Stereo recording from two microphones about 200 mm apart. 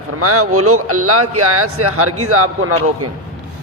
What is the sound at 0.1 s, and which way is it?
Speech, 90° right.